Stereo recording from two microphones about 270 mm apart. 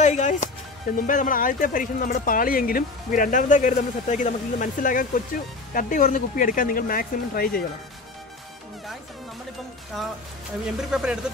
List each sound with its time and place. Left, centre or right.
0.0 s music: left
0.9 s speech: left
10.8 s speech: centre